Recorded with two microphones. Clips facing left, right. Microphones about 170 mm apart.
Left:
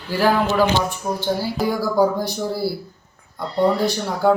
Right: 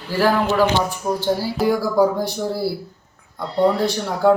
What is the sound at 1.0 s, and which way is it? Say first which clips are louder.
Speech: right 2 dB; centre (ahead or behind).